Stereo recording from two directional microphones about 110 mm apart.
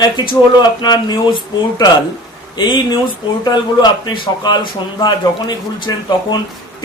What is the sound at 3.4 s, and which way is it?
Speech, 40° left (ahead or behind).